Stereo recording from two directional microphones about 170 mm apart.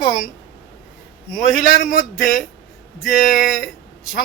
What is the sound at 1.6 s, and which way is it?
Speech, 55° left (ahead or behind).